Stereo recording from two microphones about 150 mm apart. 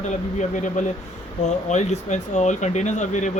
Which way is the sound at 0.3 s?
55° left (ahead or behind).